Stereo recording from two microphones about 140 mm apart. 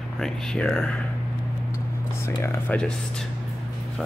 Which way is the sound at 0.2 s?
5° left (ahead or behind).